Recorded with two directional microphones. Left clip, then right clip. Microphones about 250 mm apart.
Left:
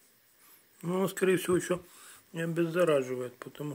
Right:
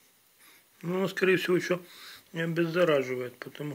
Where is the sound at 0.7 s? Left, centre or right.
Centre.